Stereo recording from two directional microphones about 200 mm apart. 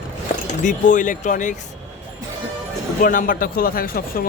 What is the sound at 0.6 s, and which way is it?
Speech, 40° left (ahead or behind).